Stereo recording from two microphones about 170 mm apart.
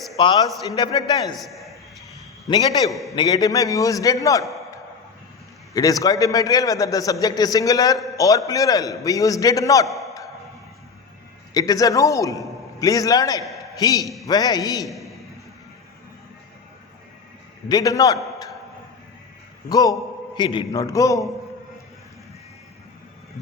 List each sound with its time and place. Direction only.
0.2 s a man's voice: 30° left (ahead or behind)
1.4 s a man's voice: centre (ahead or behind)
2.5 s a man's voice: 20° left (ahead or behind)
2.9 s a man's voice: centre (ahead or behind)
3.2 s a man's voice: 20° left (ahead or behind)
5.7 s a man's voice: 20° left (ahead or behind)
9.8 s a man's voice: centre (ahead or behind)
11.5 s a man's voice: 20° left (ahead or behind)
14.0 s a man's voice: centre (ahead or behind)
14.3 s a man's voice: 25° left (ahead or behind)
14.8 s a man's voice: centre (ahead or behind)
17.7 s a man's voice: 20° left (ahead or behind)
19.6 s a man's voice: 20° left (ahead or behind)